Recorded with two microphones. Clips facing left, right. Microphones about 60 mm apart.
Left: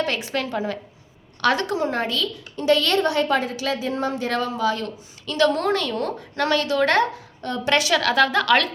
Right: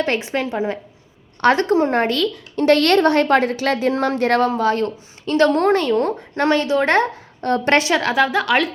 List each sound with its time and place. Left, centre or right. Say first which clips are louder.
0.0 s a woman's voice: right 4 dB; right
1.4 s a woman's voice: right 6 dB; right
3.7 s speech: right 5 dB; right
7.4 s a woman's voice: right 6 dB; right
7.8 s a woman's voice: right 2 dB; right
8.1 s a woman's voice: even; centre